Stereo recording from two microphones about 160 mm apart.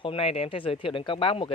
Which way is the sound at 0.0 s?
35° left (ahead or behind).